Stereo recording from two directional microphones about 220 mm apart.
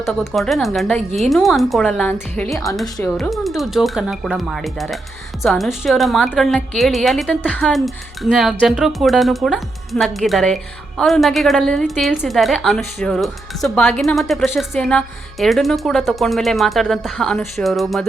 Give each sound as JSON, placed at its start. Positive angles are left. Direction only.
{"t": 0.0, "sound": "a woman's voice", "side_deg": 0}